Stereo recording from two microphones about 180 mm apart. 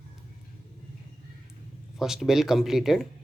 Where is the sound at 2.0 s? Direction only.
Centre (ahead or behind).